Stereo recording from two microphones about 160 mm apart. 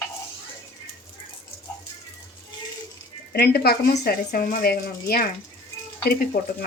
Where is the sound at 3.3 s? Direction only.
80° left.